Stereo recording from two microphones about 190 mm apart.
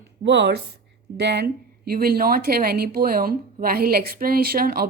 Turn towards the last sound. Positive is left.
turn(degrees=-50)  # may be behind; listen again after turning